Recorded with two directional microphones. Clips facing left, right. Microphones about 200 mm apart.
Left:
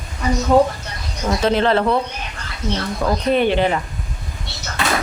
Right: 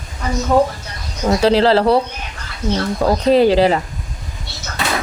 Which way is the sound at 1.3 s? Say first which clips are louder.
Right 4 dB; 30° right (ahead or behind).